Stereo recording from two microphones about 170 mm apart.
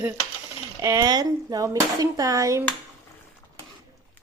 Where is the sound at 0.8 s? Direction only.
20° right (ahead or behind).